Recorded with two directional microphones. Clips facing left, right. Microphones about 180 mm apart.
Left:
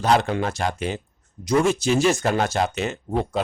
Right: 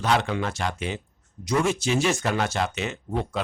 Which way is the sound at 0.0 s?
40° left (ahead or behind).